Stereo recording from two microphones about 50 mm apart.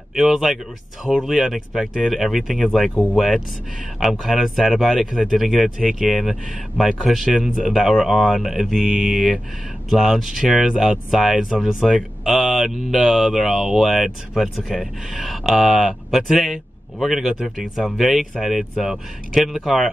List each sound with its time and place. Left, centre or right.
0.1 s speech: centre
2.9 s speech: left
3.2 s speech: centre
9.8 s speech: centre